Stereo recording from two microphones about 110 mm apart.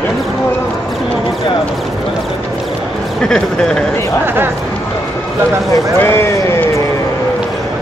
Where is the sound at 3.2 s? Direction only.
5° left (ahead or behind).